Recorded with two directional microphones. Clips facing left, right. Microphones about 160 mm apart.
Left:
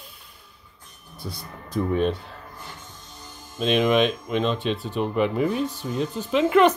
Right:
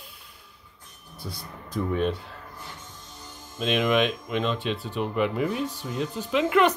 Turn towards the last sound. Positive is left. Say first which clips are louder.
# left 4 dB
turn(degrees=30)  # may be behind; listen again after turning